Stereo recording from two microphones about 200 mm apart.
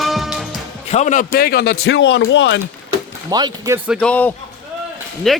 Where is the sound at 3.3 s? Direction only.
20° right (ahead or behind).